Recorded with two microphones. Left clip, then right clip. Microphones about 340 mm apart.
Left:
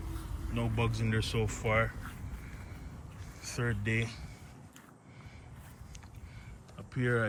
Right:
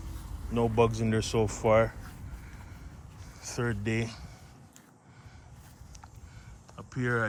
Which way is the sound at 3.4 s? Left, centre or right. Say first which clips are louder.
Right 3 dB; centre.